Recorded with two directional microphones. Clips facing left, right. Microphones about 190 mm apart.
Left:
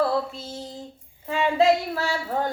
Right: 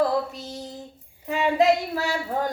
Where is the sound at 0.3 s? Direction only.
15° right (ahead or behind).